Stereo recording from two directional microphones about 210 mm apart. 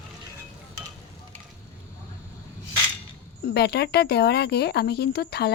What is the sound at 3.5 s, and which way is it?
Speech, 50° left (ahead or behind).